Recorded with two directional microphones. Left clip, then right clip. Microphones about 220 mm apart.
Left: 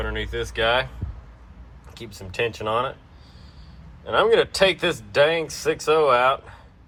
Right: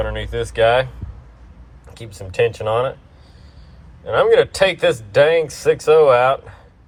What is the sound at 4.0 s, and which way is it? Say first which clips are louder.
Speech: right 5 dB; 10° left (ahead or behind).